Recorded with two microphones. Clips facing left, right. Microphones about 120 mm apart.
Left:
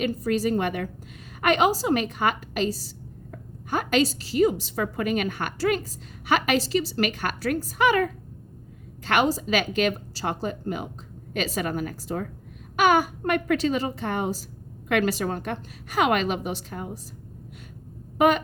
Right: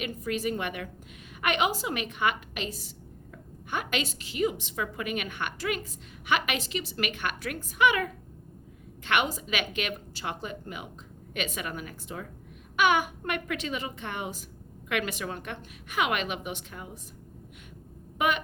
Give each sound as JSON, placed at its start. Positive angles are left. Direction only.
{"t": 0.0, "sound": "a woman's voice", "side_deg": 35}
{"t": 18.2, "sound": "a woman's voice", "side_deg": 35}